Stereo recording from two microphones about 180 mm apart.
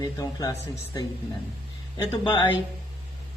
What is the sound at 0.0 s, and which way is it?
Speech, 20° left (ahead or behind).